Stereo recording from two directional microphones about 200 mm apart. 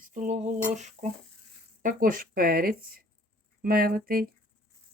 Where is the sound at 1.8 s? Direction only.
45° right (ahead or behind).